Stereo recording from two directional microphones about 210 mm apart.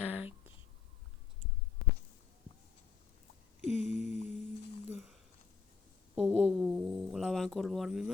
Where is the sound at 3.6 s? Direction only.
30° left (ahead or behind).